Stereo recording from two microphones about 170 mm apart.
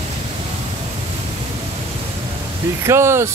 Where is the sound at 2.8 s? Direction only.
15° right (ahead or behind).